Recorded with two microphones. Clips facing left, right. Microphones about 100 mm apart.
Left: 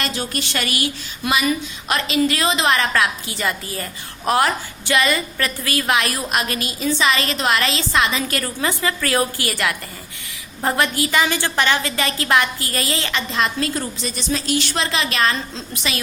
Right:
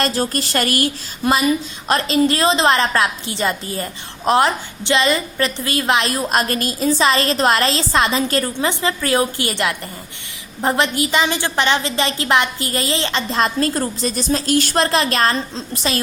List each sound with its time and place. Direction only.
0.0 s a woman's voice: 40° right (ahead or behind)